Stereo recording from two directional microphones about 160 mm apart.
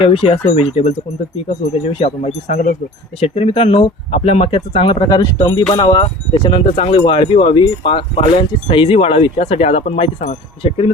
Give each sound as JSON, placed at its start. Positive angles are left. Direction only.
{"t": 0.0, "sound": "speech", "side_deg": 35}